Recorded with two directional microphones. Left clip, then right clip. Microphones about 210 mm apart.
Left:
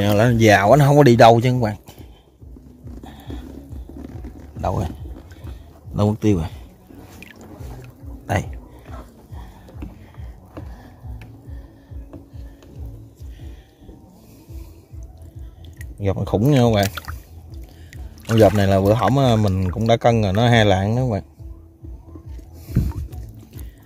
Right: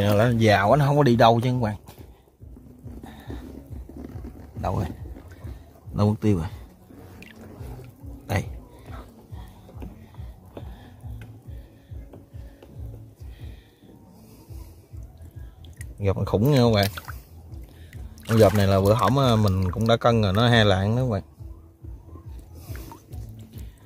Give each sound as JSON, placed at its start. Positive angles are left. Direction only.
{"t": 0.0, "sound": "speech", "side_deg": 20}
{"t": 3.0, "sound": "livestock", "side_deg": 5}
{"t": 4.6, "sound": "speech", "side_deg": 10}
{"t": 5.9, "sound": "speech", "side_deg": 10}
{"t": 15.8, "sound": "speech", "side_deg": 5}
{"t": 18.2, "sound": "speech", "side_deg": 5}